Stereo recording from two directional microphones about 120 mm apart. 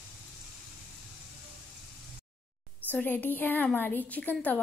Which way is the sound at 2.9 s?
15° left (ahead or behind).